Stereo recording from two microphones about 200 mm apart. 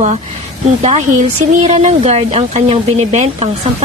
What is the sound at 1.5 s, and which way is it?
Speech, 35° right (ahead or behind).